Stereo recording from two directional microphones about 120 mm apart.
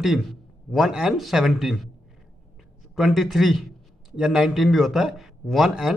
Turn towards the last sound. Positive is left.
turn(degrees=-5)  # may be behind; listen again after turning